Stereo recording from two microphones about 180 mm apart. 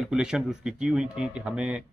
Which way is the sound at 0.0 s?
5° right (ahead or behind).